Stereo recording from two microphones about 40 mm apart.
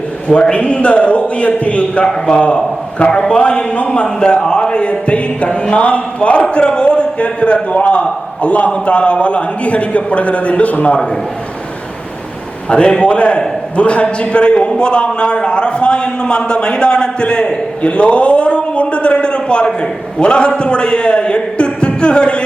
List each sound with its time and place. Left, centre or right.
0.5 s a man's voice: left
2.0 s a man's voice: left
12.7 s a man's voice: left